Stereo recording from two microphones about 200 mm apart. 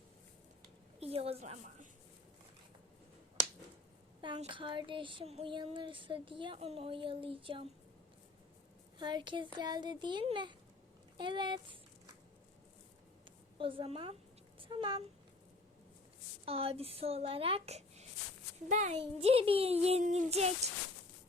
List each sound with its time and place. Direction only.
0.9 s a woman's voice: 30° right (ahead or behind)
4.2 s child singing: 25° right (ahead or behind)
9.0 s child singing: 20° right (ahead or behind)
13.6 s child singing: 25° right (ahead or behind)
14.6 s speech: 25° right (ahead or behind)
16.5 s child singing: 30° right (ahead or behind)
18.7 s a child's voice: 35° right (ahead or behind)